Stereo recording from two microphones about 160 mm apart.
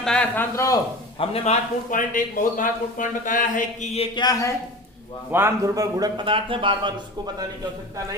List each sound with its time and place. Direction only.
0.0 s a man's voice: 5° left (ahead or behind)
0.5 s a man's voice: 20° left (ahead or behind)
1.2 s a man's voice: 40° left (ahead or behind)
1.9 s speech: 55° left (ahead or behind); by 4.5 s 20° left (ahead or behind)
5.3 s speech: 15° right (ahead or behind); by 6.9 s 30° right (ahead or behind)